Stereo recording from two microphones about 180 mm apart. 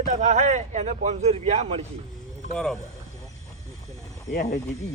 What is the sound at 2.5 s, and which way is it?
Speech, 5° left (ahead or behind).